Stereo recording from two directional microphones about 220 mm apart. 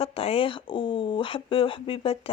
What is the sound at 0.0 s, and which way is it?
Speech, 25° left (ahead or behind).